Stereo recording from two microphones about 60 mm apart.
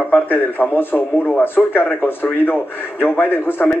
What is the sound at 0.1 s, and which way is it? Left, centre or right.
A man's voice, left.